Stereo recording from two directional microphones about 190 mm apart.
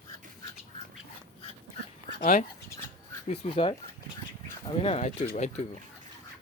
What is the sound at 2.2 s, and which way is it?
Speech, 45° left (ahead or behind).